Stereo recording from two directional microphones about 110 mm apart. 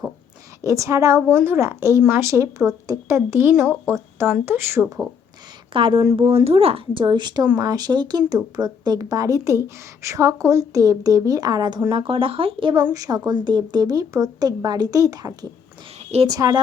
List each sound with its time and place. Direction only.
0.6 s speech: 30° right (ahead or behind)
5.7 s speech: 50° right (ahead or behind)
6.3 s a woman's voice: 65° right (ahead or behind); by 11.8 s 40° right (ahead or behind)
11.9 s speech: 50° right (ahead or behind)
12.9 s a woman's voice: 35° right (ahead or behind)